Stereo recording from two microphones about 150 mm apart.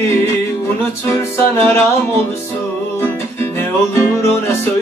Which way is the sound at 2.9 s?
15° left (ahead or behind).